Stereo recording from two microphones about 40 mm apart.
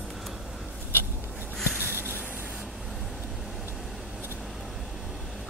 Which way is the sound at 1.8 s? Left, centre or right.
Right.